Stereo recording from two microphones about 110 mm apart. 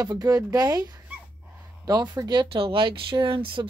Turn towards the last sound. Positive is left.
turn(degrees=-50)  # may be behind; listen again after turning